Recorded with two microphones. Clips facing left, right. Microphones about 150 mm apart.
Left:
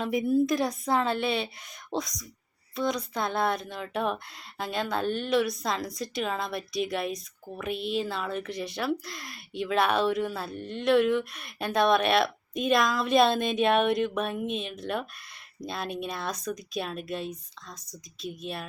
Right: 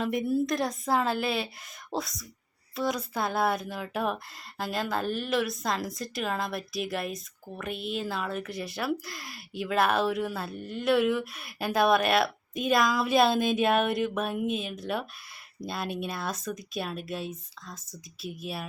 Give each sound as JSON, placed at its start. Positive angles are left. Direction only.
{"t": 0.0, "sound": "speech", "side_deg": 0}